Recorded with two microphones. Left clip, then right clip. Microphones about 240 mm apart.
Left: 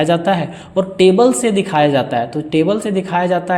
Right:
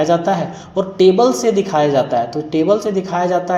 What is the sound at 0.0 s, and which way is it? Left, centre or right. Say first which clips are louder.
Speech: even; left.